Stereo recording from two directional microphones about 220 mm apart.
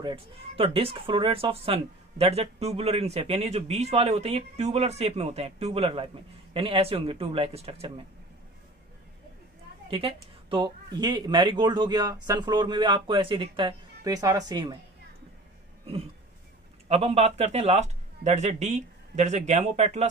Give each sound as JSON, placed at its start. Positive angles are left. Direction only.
{"t": 0.0, "sound": "speech", "side_deg": -25}
{"t": 9.8, "sound": "speech", "side_deg": -25}
{"t": 16.9, "sound": "speech", "side_deg": -25}